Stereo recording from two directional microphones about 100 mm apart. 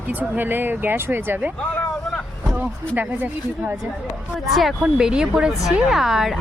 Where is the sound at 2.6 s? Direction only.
20° right (ahead or behind).